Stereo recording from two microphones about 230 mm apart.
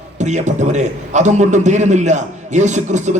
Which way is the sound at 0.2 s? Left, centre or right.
Right.